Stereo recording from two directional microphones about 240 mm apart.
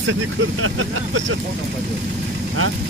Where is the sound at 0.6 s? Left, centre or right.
Right.